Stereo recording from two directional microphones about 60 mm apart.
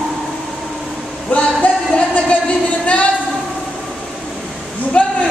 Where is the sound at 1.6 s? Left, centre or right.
Left.